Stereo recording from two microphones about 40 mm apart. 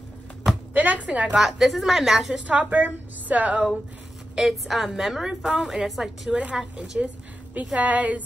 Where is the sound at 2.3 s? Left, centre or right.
Right.